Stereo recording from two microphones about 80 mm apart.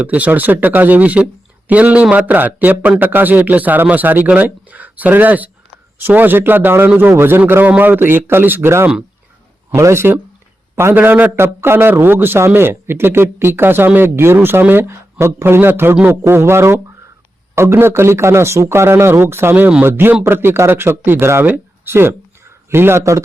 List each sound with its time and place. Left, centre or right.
0.0 s a man's voice: centre; by 23.2 s right